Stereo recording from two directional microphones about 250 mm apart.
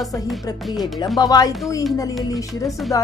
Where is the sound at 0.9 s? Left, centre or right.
Centre.